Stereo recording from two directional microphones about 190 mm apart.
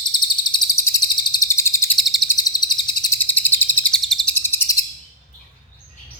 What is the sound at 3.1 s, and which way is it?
Bird, 10° left (ahead or behind).